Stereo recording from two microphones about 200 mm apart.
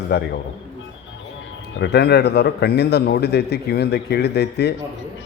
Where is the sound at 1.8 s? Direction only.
55° left (ahead or behind).